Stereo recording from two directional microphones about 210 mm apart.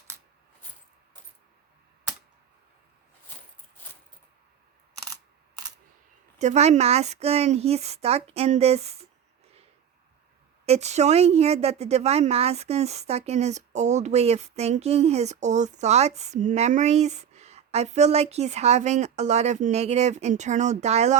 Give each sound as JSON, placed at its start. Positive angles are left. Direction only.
{"t": 6.4, "sound": "speech", "side_deg": -30}
{"t": 10.7, "sound": "a woman's voice", "side_deg": -30}